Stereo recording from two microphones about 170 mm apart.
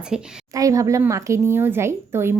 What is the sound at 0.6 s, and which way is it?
A woman's voice, 20° right (ahead or behind).